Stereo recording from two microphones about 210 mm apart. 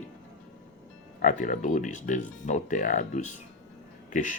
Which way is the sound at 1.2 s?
35° left (ahead or behind).